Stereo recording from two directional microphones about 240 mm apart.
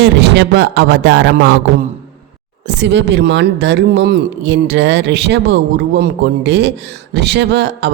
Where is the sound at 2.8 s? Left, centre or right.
Right.